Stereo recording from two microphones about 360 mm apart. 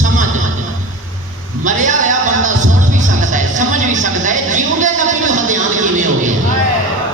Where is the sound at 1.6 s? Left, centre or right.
Right.